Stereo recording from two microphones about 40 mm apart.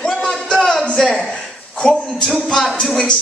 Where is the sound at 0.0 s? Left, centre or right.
Centre.